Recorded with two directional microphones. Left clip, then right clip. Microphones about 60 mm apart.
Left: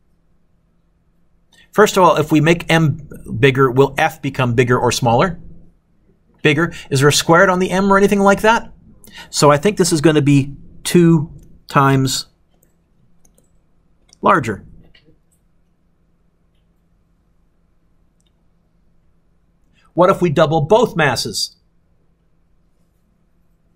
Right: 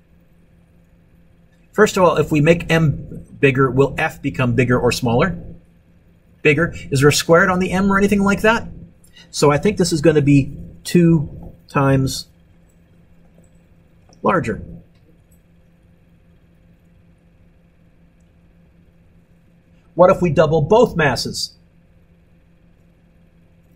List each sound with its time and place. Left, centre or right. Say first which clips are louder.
1.7 s speech: left 3 dB; left
6.4 s speech: even; left
14.2 s speech: left 4 dB; left
20.0 s speech: even; left